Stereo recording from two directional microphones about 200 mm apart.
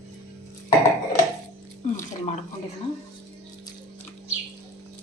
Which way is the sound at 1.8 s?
35° left (ahead or behind).